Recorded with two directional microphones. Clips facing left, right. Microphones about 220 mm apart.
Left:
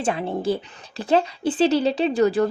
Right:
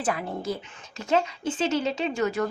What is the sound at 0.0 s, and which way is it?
A woman's voice, 25° left (ahead or behind).